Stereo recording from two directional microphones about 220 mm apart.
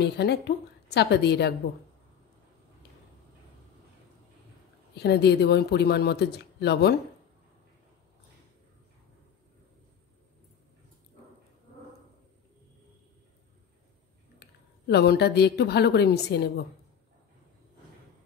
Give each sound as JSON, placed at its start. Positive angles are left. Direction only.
{"t": 0.0, "sound": "speech", "side_deg": 50}
{"t": 4.9, "sound": "speech", "side_deg": 50}
{"t": 14.9, "sound": "speech", "side_deg": 50}